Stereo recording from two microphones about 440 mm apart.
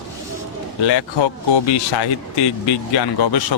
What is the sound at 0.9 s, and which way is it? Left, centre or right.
A man's voice, left.